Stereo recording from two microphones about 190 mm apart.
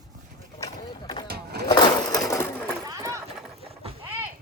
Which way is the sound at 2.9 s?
15° right (ahead or behind).